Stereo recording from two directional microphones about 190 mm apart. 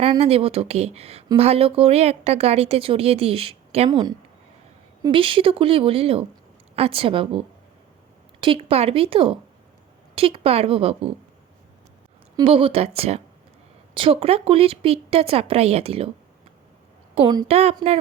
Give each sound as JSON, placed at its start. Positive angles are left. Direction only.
{"t": 0.0, "sound": "speech", "side_deg": -30}
{"t": 12.4, "sound": "speech", "side_deg": -30}
{"t": 17.2, "sound": "speech", "side_deg": -20}
{"t": 17.5, "sound": "speech", "side_deg": -35}